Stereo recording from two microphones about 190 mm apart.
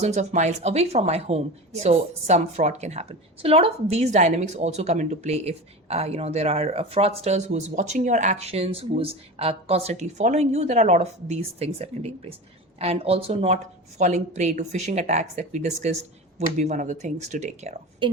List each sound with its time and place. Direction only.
0.0 s a woman's voice: 35° right (ahead or behind)